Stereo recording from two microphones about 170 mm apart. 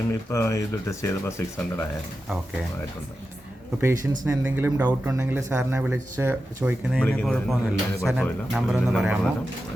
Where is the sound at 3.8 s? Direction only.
15° right (ahead or behind).